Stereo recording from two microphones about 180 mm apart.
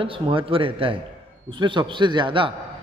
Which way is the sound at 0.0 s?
30° right (ahead or behind).